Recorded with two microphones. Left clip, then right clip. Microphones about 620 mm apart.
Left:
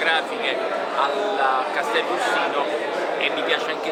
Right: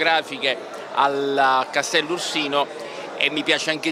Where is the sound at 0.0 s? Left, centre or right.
Right.